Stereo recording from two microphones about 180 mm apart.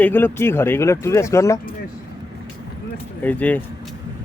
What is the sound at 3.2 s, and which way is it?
Speech, 10° left (ahead or behind).